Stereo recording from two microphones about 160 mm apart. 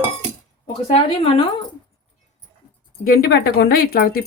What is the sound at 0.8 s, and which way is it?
Speech, 35° left (ahead or behind).